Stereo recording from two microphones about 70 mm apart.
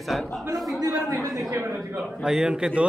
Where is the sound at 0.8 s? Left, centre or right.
Right.